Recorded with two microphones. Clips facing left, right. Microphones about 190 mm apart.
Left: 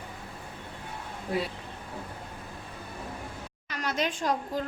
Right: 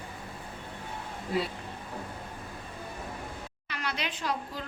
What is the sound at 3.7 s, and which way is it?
Speech, 45° left (ahead or behind).